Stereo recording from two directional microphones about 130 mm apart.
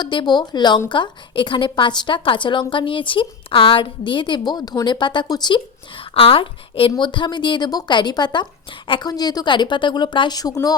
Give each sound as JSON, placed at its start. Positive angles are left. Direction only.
{"t": 0.0, "sound": "a woman's voice", "side_deg": 35}